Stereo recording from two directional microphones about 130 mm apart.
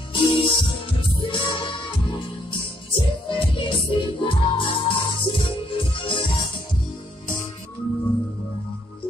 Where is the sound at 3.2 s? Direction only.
40° left (ahead or behind).